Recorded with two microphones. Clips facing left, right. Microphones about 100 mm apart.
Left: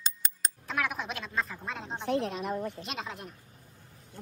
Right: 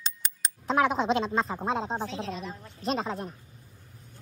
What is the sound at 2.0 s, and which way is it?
Speech, 60° left (ahead or behind).